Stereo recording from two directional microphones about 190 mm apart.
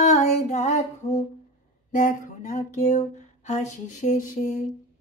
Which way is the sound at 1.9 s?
45° left (ahead or behind).